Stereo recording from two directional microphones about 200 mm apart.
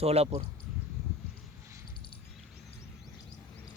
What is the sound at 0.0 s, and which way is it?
Speech, 30° right (ahead or behind).